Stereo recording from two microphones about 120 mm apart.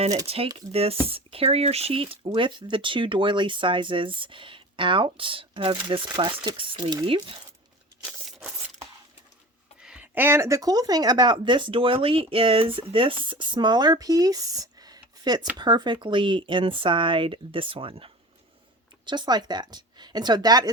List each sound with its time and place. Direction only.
0.3 s speech: 55° right (ahead or behind)
9.8 s speech: 10° right (ahead or behind); by 18.1 s 50° right (ahead or behind)
19.0 s speech: 35° right (ahead or behind)